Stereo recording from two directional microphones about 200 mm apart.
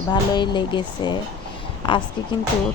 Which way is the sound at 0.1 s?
20° left (ahead or behind).